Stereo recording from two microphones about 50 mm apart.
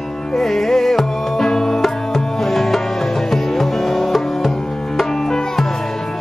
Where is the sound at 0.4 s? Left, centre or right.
Centre.